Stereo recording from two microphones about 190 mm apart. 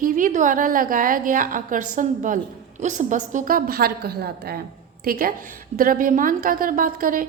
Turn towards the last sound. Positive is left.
turn(degrees=-45)  # may be behind; listen again after turning